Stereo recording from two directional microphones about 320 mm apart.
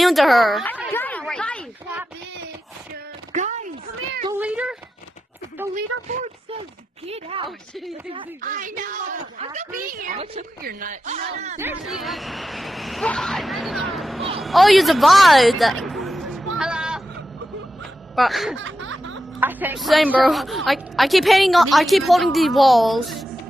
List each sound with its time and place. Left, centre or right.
0.0 s a sound: centre
3.3 s a sound: right
4.3 s a sound: centre
5.6 s speech: centre
6.0 s speech: right
11.5 s a woman's voice: centre
16.5 s vehicle: centre
18.1 s a woman's voice: centre
18.6 s snicker: right
19.4 s a woman's voice: centre